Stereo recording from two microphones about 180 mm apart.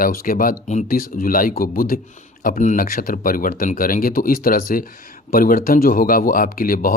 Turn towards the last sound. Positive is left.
turn(degrees=50)  # may be behind; listen again after turning